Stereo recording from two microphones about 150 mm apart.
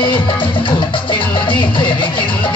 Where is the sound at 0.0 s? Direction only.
35° left (ahead or behind).